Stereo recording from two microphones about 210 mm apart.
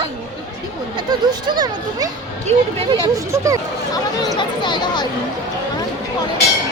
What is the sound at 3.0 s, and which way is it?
Speech, 15° right (ahead or behind).